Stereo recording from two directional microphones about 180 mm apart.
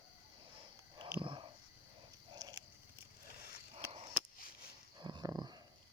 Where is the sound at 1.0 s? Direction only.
30° right (ahead or behind).